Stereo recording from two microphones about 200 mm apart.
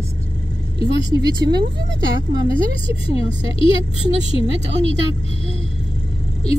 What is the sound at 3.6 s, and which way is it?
Speech, 25° left (ahead or behind).